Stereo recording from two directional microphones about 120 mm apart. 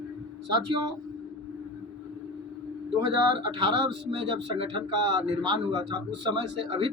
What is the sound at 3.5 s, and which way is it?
A man's voice, 45° right (ahead or behind).